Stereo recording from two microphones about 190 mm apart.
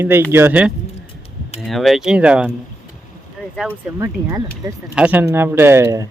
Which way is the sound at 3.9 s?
15° right (ahead or behind).